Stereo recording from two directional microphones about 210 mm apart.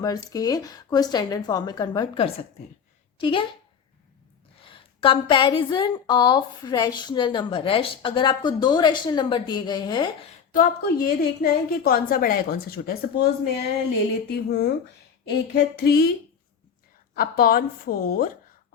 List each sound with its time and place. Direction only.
0.0 s a woman's voice: 15° left (ahead or behind)
4.7 s a woman's voice: 25° left (ahead or behind)
10.5 s a woman's voice: 40° left (ahead or behind)
14.3 s a woman's voice: 50° left (ahead or behind)
17.2 s a woman's voice: 45° left (ahead or behind)